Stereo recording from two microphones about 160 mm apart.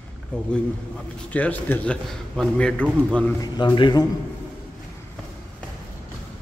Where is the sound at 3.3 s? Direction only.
30° left (ahead or behind).